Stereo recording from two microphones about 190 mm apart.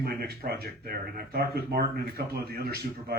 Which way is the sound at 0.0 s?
55° right (ahead or behind).